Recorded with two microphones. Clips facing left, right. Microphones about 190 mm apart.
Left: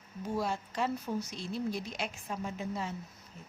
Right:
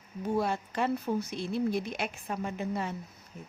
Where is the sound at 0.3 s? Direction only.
60° right (ahead or behind).